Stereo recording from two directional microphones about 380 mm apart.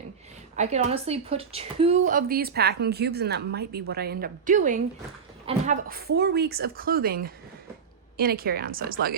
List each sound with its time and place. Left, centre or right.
0.5 s a woman's voice: centre